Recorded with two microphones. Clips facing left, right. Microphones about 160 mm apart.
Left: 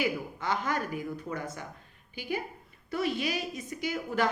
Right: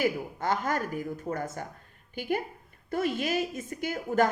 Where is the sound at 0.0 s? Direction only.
50° right (ahead or behind).